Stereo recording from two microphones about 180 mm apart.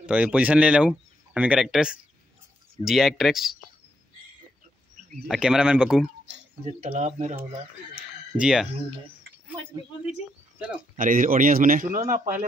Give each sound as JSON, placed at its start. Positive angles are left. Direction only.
{"t": 0.0, "sound": "speech", "side_deg": -5}
{"t": 5.3, "sound": "speech", "side_deg": -5}
{"t": 6.8, "sound": "speech", "side_deg": -45}
{"t": 8.4, "sound": "speech", "side_deg": -5}
{"t": 11.0, "sound": "speech", "side_deg": -50}